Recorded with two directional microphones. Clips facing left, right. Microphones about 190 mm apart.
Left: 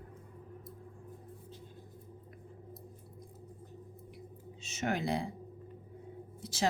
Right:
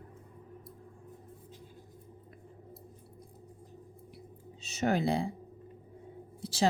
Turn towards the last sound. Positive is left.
turn(degrees=-30)  # may be behind; listen again after turning